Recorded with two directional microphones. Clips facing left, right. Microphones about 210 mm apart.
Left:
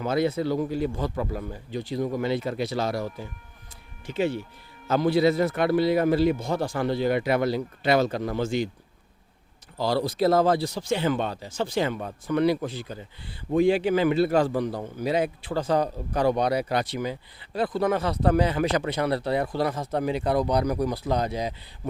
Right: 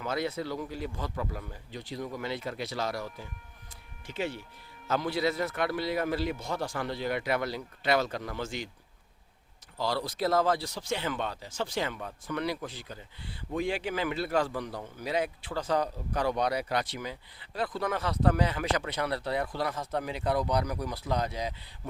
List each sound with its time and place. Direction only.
0.0 s a man's voice: 30° left (ahead or behind)
9.7 s a man's voice: 30° left (ahead or behind)